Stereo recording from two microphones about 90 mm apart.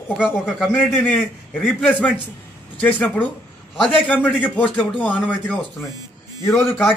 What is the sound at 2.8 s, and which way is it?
Speech, 15° left (ahead or behind).